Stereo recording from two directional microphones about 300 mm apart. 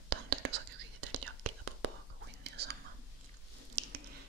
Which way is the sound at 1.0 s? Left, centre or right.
Right.